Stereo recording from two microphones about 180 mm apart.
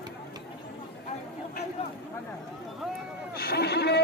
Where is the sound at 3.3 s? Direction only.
60° left (ahead or behind).